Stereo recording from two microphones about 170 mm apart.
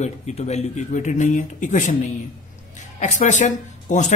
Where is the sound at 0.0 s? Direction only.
40° left (ahead or behind).